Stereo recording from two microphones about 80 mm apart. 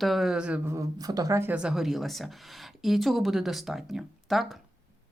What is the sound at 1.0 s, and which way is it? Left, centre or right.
Speech, right.